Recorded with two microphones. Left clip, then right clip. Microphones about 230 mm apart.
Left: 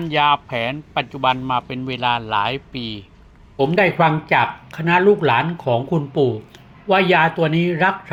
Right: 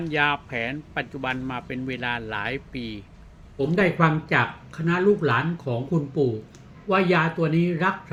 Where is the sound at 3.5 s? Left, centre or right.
Centre.